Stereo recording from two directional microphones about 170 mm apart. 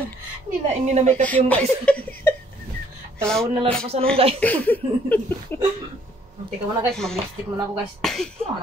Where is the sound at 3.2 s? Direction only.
5° left (ahead or behind).